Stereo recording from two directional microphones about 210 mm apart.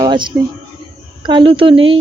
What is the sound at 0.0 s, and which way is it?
Speech, 20° right (ahead or behind).